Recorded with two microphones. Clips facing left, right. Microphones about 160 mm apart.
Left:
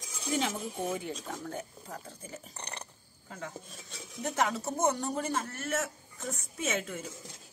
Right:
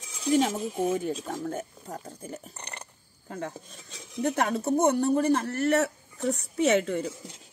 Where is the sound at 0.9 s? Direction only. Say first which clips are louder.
Right 7 dB; 40° right (ahead or behind).